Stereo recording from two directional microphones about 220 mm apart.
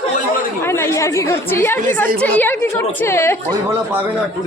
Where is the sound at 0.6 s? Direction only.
10° left (ahead or behind).